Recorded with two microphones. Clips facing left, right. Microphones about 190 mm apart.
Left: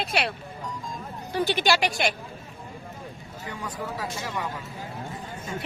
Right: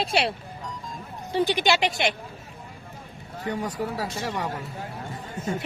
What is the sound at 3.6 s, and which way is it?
Speech, 40° right (ahead or behind).